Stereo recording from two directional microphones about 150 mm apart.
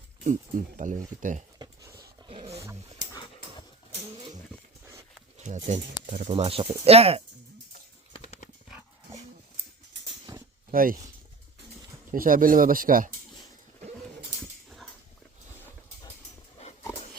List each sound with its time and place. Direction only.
0.3 s speech: 55° right (ahead or behind)
1.5 s a sound: 25° right (ahead or behind)
2.2 s dog: 35° right (ahead or behind)
5.4 s speech: 50° right (ahead or behind)
6.3 s speech: 40° right (ahead or behind)
8.1 s a sound: 50° left (ahead or behind)
10.3 s a sound: 25° right (ahead or behind)
10.7 s speech: 70° right (ahead or behind)
12.1 s speech: 65° right (ahead or behind)